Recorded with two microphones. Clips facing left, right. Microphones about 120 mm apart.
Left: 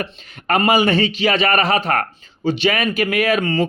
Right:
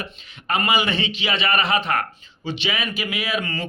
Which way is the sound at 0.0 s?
55° left (ahead or behind).